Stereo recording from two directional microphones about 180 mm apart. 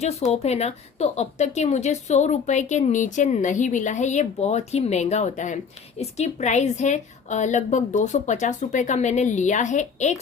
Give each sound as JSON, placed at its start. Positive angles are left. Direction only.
{"t": 0.3, "sound": "speech", "side_deg": 35}